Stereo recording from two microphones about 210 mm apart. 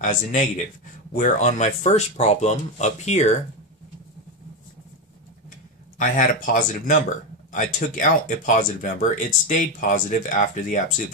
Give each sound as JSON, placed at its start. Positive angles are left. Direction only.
{"t": 0.0, "sound": "speech", "side_deg": 35}
{"t": 5.9, "sound": "speech", "side_deg": 40}